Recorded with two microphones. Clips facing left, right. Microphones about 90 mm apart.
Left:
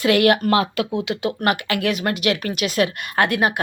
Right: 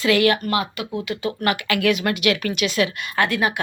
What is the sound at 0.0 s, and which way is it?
Speech, 50° left (ahead or behind).